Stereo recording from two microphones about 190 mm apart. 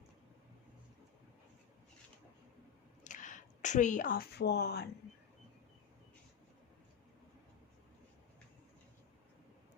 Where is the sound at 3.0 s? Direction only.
40° left (ahead or behind); by 4.8 s 60° left (ahead or behind).